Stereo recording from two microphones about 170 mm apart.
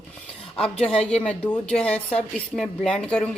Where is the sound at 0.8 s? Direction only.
5° left (ahead or behind).